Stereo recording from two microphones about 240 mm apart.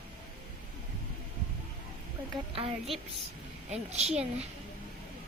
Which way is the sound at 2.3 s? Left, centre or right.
Right.